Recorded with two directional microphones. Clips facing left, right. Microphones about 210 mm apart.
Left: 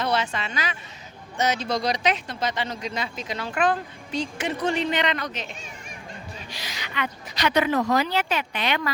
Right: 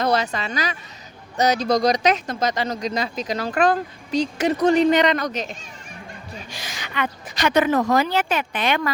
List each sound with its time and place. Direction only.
0.0 s speech: 40° right (ahead or behind)
6.5 s a woman's voice: 50° right (ahead or behind)